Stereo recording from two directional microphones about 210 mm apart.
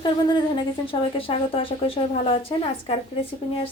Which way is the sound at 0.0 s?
20° left (ahead or behind).